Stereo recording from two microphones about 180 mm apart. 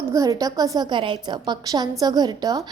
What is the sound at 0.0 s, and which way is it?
A woman's voice, 20° right (ahead or behind).